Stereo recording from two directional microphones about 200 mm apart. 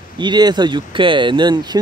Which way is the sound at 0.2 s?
20° right (ahead or behind).